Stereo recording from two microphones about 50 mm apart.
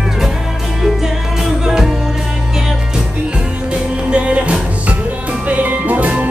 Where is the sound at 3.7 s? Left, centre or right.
Right.